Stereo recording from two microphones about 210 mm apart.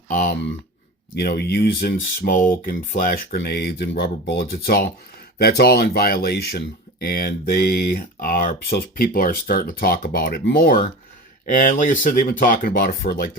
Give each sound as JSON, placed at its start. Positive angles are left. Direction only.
{"t": 0.1, "sound": "speech", "side_deg": 40}